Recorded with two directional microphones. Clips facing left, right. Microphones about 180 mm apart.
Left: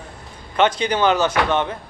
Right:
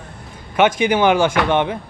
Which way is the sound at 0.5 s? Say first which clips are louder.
Right 3 dB; 10° right (ahead or behind).